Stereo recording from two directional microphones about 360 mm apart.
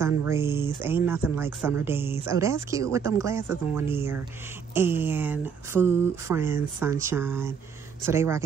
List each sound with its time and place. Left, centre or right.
0.3 s speech: centre